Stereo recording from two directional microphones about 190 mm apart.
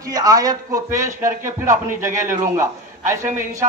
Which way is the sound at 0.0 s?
20° right (ahead or behind).